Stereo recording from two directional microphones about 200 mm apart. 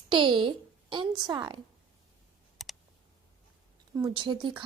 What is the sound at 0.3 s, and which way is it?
A woman's voice, 25° right (ahead or behind).